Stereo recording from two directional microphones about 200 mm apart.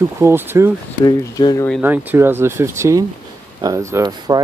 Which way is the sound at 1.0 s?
20° left (ahead or behind).